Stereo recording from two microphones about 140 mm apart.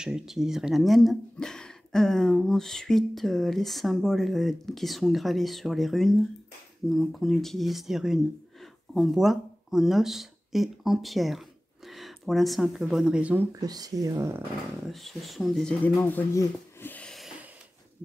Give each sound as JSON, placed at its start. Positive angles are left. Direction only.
{"t": 0.0, "sound": "speech", "side_deg": -5}
{"t": 13.6, "sound": "speech", "side_deg": -25}
{"t": 14.9, "sound": "speech", "side_deg": 0}
{"t": 15.8, "sound": "speech", "side_deg": 15}
{"t": 16.3, "sound": "a sound", "side_deg": 15}